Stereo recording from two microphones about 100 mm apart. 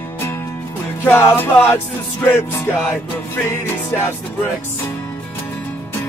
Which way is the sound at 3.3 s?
25° left (ahead or behind).